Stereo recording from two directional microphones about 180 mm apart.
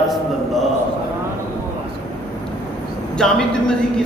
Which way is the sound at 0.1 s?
Centre (ahead or behind).